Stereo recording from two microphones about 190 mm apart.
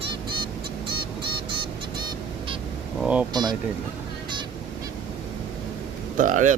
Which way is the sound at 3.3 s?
20° right (ahead or behind).